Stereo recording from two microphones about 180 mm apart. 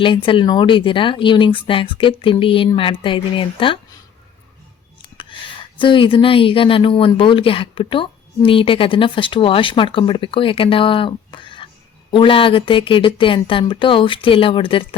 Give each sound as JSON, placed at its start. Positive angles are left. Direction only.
{"t": 0.0, "sound": "speech", "side_deg": 30}
{"t": 5.1, "sound": "speech", "side_deg": 25}